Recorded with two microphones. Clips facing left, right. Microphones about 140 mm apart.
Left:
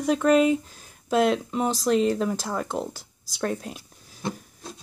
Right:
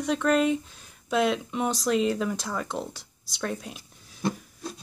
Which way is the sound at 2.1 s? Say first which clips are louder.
Left 3 dB; 35° left (ahead or behind).